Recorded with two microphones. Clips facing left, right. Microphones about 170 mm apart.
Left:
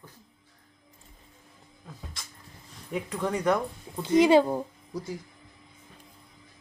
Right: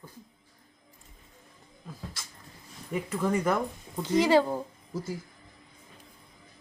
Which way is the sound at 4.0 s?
15° left (ahead or behind).